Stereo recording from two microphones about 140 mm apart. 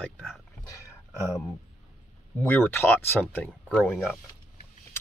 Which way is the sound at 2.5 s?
15° left (ahead or behind).